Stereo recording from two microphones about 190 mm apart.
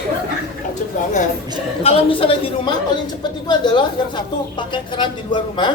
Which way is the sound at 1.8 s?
30° left (ahead or behind).